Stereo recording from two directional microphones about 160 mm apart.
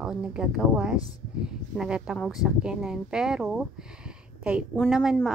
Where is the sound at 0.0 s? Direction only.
5° right (ahead or behind).